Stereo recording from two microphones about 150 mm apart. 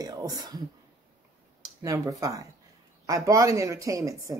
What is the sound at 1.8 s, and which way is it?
Speech, 20° right (ahead or behind).